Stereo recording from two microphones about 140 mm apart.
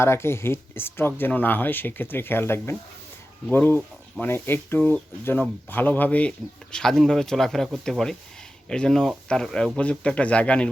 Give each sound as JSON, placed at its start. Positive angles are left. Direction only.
{"t": 0.0, "sound": "speech", "side_deg": 20}